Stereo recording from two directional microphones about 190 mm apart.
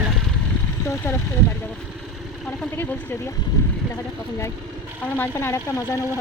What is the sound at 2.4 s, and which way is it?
Speech, 5° left (ahead or behind).